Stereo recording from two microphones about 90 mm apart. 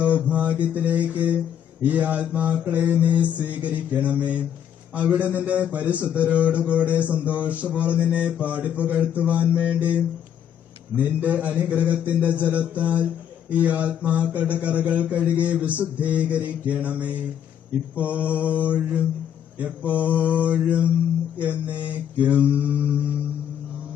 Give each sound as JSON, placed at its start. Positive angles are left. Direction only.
{"t": 0.0, "sound": "a man's voice", "side_deg": -15}